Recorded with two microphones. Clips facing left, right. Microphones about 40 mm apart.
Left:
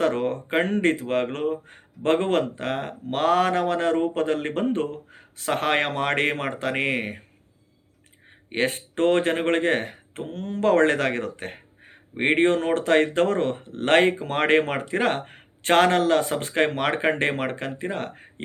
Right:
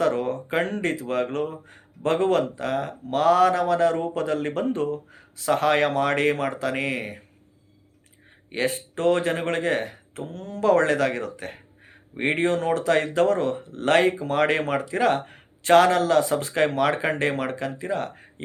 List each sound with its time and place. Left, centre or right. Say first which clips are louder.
0.0 s speech: even; left
8.4 s speech: left 1 dB; left